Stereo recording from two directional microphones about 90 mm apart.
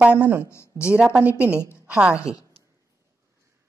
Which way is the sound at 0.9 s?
15° right (ahead or behind).